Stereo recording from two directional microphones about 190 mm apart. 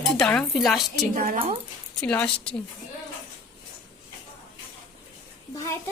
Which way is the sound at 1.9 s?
5° left (ahead or behind).